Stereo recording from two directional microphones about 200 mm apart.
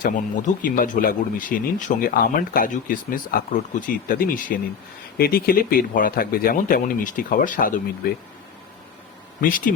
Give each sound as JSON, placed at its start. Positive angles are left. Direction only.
{"t": 0.0, "sound": "speech", "side_deg": 40}
{"t": 9.4, "sound": "speech", "side_deg": 45}